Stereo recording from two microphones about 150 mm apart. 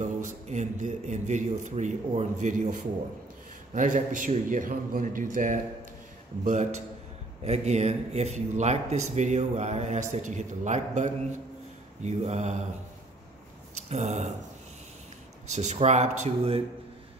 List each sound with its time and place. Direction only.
0.0 s a man's voice: 50° right (ahead or behind)
13.7 s speech: 50° right (ahead or behind)
15.4 s speech: 50° right (ahead or behind)